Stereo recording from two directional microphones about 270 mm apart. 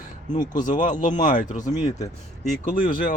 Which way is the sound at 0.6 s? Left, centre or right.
Left.